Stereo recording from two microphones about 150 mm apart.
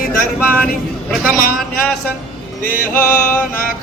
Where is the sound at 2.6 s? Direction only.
15° left (ahead or behind).